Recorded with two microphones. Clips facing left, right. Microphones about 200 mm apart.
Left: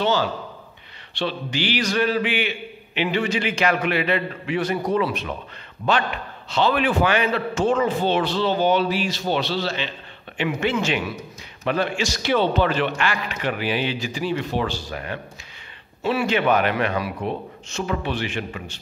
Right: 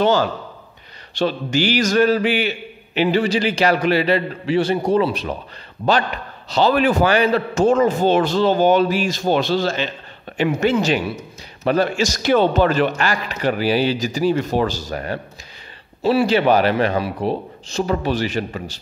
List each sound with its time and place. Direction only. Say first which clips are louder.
0.0 s a man's voice: right 5 dB; 50° right (ahead or behind)